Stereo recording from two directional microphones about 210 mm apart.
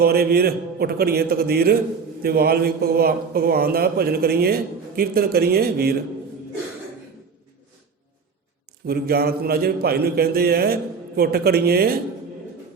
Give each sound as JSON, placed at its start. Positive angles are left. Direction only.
{"t": 0.0, "sound": "a man's voice", "side_deg": -45}
{"t": 8.9, "sound": "a man's voice", "side_deg": -45}